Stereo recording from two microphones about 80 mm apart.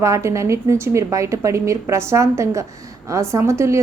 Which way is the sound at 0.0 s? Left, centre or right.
Right.